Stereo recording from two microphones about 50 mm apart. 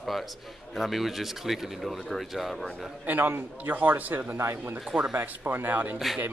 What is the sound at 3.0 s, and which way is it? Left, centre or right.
A man's voice, right.